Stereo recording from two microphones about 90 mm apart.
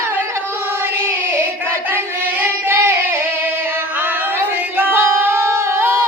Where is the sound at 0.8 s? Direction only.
25° right (ahead or behind).